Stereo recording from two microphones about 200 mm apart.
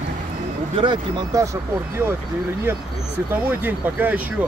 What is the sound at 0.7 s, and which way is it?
Speech, 20° right (ahead or behind).